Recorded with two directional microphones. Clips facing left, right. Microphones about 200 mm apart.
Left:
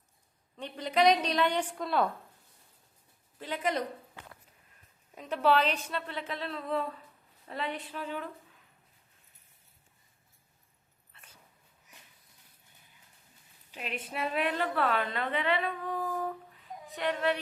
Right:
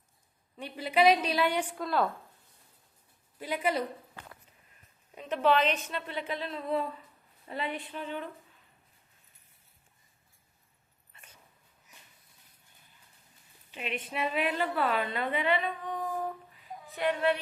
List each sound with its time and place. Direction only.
0.5 s a woman's voice: 5° right (ahead or behind)
3.3 s a woman's voice: 10° right (ahead or behind)
5.1 s a woman's voice: 5° left (ahead or behind)
14.1 s a woman's voice: centre (ahead or behind)